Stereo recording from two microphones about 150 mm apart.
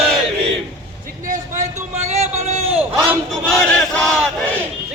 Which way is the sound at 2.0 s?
45° right (ahead or behind).